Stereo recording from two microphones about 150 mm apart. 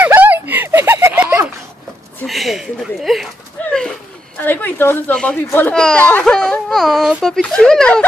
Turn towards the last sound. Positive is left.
turn(degrees=5)  # may be behind; listen again after turning